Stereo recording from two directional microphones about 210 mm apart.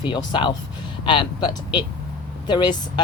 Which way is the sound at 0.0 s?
20° left (ahead or behind).